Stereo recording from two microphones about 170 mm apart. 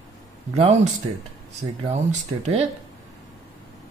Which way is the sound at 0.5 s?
40° right (ahead or behind).